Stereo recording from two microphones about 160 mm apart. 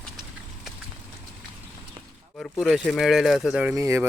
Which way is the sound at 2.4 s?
Centre (ahead or behind).